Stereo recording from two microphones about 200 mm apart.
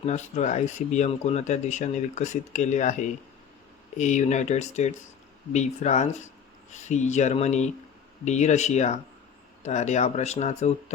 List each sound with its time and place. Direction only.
0.0 s speech: 35° left (ahead or behind)